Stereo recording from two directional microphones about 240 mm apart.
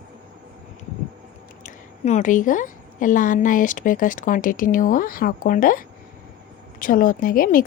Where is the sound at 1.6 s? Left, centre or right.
Left.